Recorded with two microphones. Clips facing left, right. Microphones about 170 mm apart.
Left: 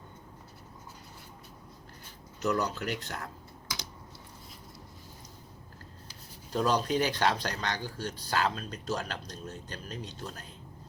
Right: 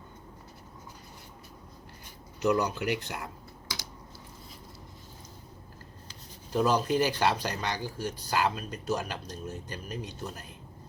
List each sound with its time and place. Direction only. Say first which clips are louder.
2.4 s speech: right 3 dB; 15° right (ahead or behind)
6.5 s speech: right 2 dB; 10° right (ahead or behind)